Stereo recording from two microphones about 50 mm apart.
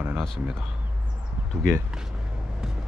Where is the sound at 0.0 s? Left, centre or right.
Right.